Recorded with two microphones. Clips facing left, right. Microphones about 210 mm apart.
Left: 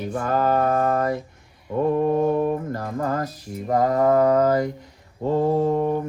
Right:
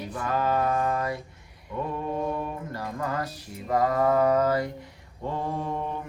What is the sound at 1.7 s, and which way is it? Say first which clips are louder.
Mantra: left 10 dB; 45° left (ahead or behind).